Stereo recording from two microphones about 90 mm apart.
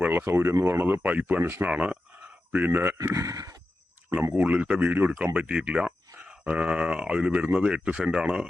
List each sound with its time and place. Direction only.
0.0 s speech: 25° right (ahead or behind)
1.7 s speech: 15° right (ahead or behind)
3.0 s speech: 35° right (ahead or behind)
4.1 s speech: 20° right (ahead or behind)